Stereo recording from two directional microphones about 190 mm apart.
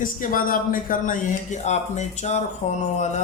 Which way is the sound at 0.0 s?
45° left (ahead or behind).